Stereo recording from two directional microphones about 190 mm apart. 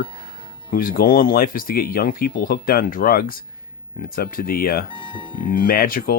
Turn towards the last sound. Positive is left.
turn(degrees=50)  # may be behind; listen again after turning